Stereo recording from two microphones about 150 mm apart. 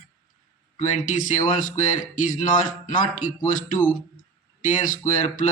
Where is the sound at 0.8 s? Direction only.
55° left (ahead or behind).